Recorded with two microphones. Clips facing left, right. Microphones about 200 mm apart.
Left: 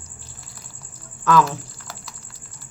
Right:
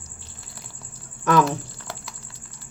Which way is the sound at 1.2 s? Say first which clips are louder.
Left 1 dB; 20° right (ahead or behind).